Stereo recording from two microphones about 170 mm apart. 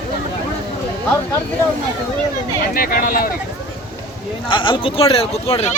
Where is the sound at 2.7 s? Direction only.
55° left (ahead or behind).